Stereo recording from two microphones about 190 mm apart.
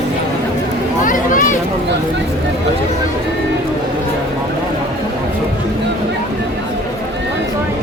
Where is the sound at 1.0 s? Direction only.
45° left (ahead or behind).